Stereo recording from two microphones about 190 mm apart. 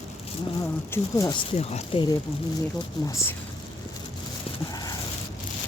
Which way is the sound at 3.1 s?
15° left (ahead or behind).